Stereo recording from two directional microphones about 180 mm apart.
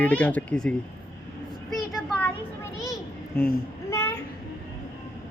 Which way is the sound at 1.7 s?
Centre (ahead or behind).